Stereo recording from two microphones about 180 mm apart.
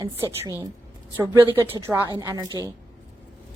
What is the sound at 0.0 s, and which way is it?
A woman's voice, 20° right (ahead or behind).